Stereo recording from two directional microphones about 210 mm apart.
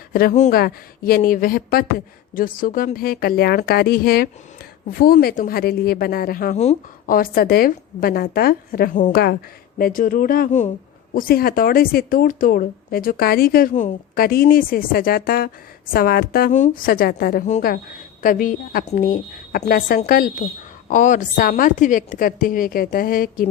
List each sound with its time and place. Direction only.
0.1 s a woman's voice: 45° left (ahead or behind)